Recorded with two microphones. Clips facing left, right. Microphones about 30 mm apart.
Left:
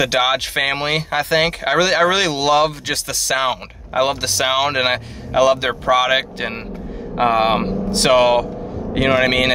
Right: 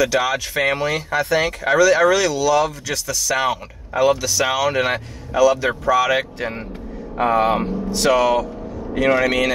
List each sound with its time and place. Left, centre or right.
0.0 s speech: left